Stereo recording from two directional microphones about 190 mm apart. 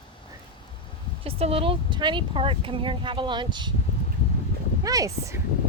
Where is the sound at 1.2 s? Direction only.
30° right (ahead or behind).